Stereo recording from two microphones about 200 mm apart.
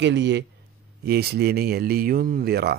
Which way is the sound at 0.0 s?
60° right (ahead or behind).